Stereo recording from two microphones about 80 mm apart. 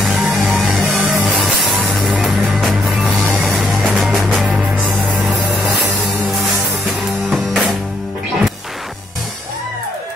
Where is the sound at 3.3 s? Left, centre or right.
Centre.